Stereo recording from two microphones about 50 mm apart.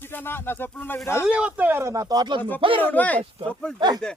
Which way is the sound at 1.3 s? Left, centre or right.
Right.